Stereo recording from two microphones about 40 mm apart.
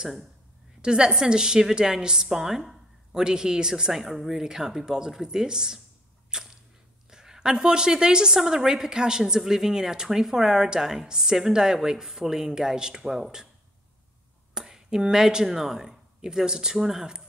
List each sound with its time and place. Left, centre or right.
0.8 s a woman's voice: right
3.9 s a woman's voice: centre
6.3 s a sound: centre
7.1 s a woman's voice: centre
14.5 s a woman's voice: centre